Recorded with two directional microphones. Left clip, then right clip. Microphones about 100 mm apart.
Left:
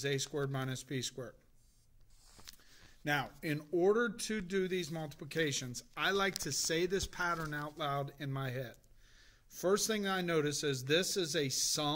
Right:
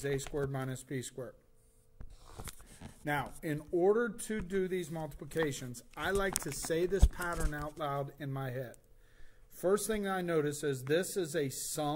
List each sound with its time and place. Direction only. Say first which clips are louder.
0.0 s speech: right 1 dB; 25° left (ahead or behind)
3.0 s speech: even; 35° left (ahead or behind)